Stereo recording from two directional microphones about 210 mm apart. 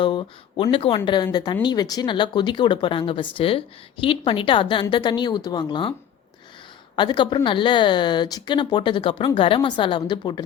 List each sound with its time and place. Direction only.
0.0 s speech: 20° left (ahead or behind)
6.9 s speech: 20° left (ahead or behind)